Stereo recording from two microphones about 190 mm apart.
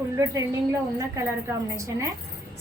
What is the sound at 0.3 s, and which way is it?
A woman's voice, 15° right (ahead or behind).